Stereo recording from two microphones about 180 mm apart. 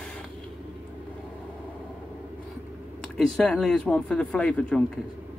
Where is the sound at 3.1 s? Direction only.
5° left (ahead or behind).